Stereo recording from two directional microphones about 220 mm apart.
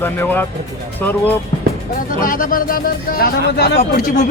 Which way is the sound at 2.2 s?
40° left (ahead or behind).